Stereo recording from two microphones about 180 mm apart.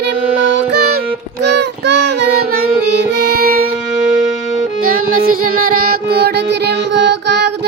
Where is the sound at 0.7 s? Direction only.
60° right (ahead or behind).